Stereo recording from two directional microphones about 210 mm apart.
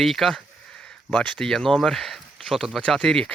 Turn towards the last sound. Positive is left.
turn(degrees=5)  # may be behind; listen again after turning